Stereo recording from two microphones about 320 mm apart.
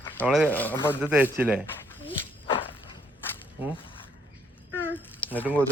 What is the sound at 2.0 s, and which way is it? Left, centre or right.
Dog, centre.